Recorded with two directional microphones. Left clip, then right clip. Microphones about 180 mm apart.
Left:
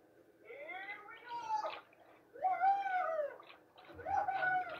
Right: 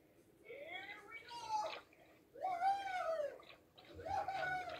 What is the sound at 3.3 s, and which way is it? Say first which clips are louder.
Bird: left 3 dB; 55° right (ahead or behind).